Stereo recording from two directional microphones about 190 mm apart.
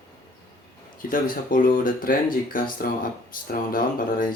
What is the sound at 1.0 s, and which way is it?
Speech, 45° left (ahead or behind).